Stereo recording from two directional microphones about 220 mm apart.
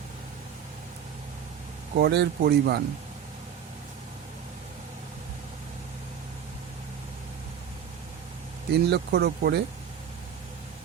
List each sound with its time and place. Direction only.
2.0 s speech: 50° right (ahead or behind)
8.7 s speech: 50° right (ahead or behind)